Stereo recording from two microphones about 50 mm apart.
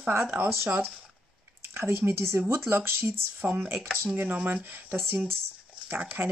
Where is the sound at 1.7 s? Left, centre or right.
Right.